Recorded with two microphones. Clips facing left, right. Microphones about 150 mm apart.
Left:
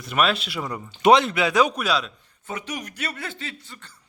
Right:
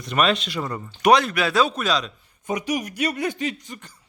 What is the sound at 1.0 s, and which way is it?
A man's voice, 20° left (ahead or behind).